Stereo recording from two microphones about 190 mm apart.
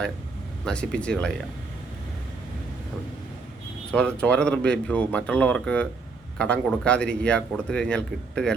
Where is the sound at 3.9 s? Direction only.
5° left (ahead or behind).